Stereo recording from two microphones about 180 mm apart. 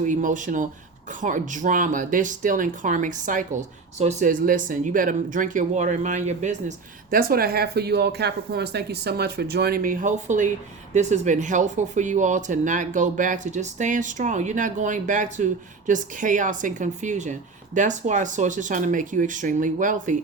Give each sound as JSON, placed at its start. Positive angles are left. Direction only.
{"t": 0.0, "sound": "speech", "side_deg": -45}